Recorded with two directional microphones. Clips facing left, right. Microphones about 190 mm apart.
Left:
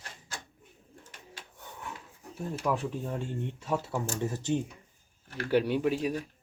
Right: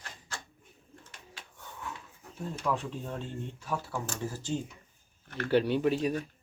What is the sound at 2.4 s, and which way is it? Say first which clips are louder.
Speech: left 2 dB; 10° left (ahead or behind).